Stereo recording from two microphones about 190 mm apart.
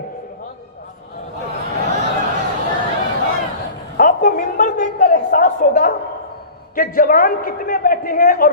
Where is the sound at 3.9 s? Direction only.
45° left (ahead or behind).